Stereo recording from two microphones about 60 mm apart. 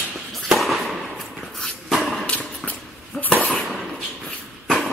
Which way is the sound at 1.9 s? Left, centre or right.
Centre.